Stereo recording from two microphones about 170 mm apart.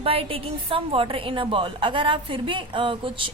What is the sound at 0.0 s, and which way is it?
A woman's voice, 35° right (ahead or behind).